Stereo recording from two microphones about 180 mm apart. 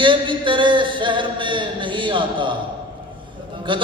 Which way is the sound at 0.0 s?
25° right (ahead or behind).